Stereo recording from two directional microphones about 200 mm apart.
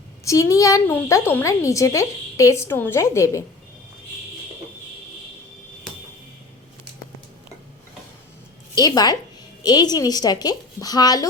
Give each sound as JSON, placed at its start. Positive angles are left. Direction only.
{"t": 0.3, "sound": "speech", "side_deg": 15}
{"t": 8.8, "sound": "a woman's voice", "side_deg": 20}